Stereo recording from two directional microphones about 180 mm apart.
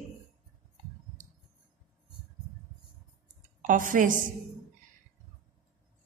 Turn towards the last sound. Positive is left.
turn(degrees=-50)  # may be behind; listen again after turning